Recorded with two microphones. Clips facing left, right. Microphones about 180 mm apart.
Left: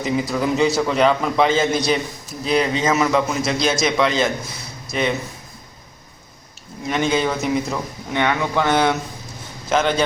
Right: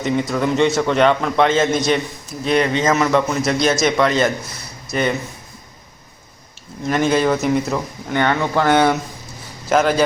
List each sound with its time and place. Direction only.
0.0 s a man's voice: centre (ahead or behind)
6.8 s speech: centre (ahead or behind)